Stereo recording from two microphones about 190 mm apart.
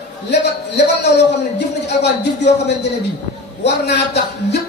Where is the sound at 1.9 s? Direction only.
65° left (ahead or behind).